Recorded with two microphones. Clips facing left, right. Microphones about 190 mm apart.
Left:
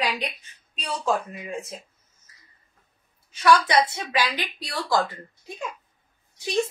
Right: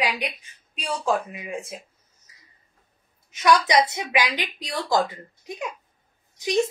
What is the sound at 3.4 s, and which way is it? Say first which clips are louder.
Speech: even; 15° right (ahead or behind).